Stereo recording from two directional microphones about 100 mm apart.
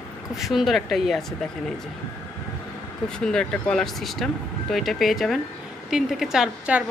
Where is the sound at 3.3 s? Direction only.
5° left (ahead or behind).